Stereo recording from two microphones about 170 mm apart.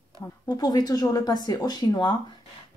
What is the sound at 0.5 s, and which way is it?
Speech, 25° left (ahead or behind).